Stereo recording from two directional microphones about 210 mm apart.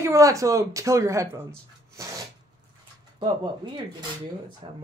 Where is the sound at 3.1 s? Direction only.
20° right (ahead or behind).